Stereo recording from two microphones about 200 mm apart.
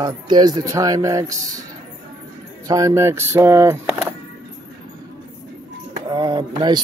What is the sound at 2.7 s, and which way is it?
Speech, 15° right (ahead or behind).